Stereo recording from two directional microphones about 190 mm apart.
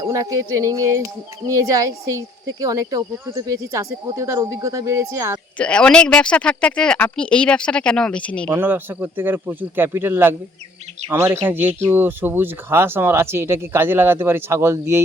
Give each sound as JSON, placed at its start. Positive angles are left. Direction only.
{"t": 0.0, "sound": "speech", "side_deg": -15}
{"t": 5.5, "sound": "speech", "side_deg": 5}
{"t": 8.4, "sound": "speech", "side_deg": -10}